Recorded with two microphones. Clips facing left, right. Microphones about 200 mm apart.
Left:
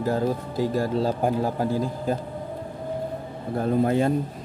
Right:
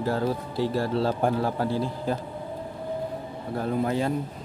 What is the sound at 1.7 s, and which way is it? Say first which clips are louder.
Speech: left 2 dB; 45° left (ahead or behind).